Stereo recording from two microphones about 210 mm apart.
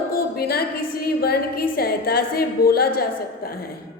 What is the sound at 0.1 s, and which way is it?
A woman's voice, 45° left (ahead or behind).